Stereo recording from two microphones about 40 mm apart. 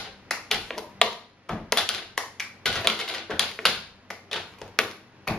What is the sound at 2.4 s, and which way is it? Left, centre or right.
Typewriter, centre.